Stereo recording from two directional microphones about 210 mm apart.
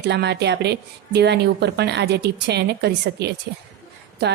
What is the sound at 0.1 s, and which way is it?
A woman's voice, 55° right (ahead or behind).